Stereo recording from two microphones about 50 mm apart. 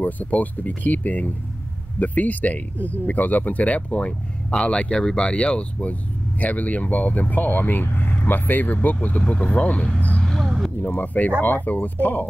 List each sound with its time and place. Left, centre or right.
0.0 s speech: left
9.9 s vehicle: left
10.8 s speech: left